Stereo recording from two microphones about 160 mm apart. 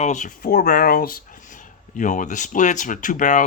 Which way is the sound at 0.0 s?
50° left (ahead or behind).